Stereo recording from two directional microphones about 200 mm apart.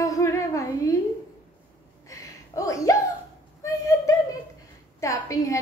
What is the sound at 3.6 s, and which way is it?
A woman's voice, 15° left (ahead or behind).